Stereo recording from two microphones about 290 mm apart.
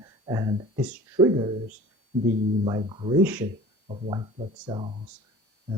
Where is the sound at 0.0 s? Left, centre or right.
Centre.